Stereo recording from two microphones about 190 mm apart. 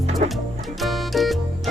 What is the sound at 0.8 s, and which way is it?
Music, centre (ahead or behind).